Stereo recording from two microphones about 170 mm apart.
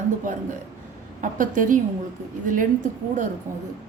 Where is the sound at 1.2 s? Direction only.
50° right (ahead or behind).